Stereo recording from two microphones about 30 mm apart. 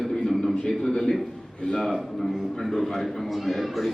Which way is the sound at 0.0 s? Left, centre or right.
Centre.